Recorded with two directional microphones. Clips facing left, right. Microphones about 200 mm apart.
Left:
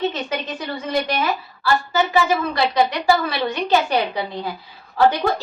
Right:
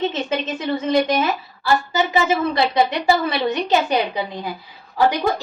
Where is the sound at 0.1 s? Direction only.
25° right (ahead or behind).